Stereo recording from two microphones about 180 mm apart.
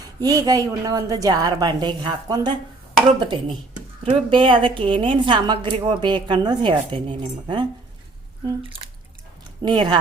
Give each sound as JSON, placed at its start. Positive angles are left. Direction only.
{"t": 0.2, "sound": "a woman's voice", "side_deg": -20}